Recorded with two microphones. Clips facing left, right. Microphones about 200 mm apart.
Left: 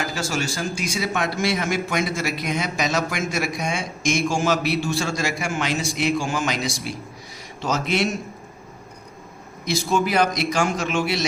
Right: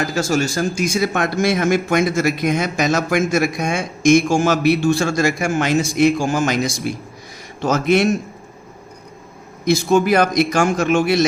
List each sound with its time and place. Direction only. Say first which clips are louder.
0.0 s a man's voice: right 7 dB; 45° right (ahead or behind)
9.6 s a man's voice: right 7 dB; 50° right (ahead or behind)